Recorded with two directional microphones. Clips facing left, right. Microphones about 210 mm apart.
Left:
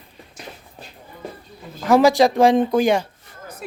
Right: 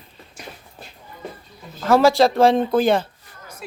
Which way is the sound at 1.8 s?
15° left (ahead or behind).